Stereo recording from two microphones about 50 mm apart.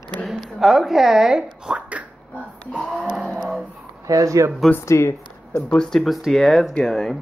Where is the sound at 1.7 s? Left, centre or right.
Right.